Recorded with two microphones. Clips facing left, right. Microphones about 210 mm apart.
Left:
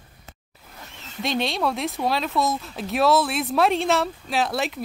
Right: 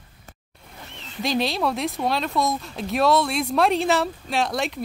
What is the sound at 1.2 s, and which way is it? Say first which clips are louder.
Speech: right 1 dB; centre (ahead or behind).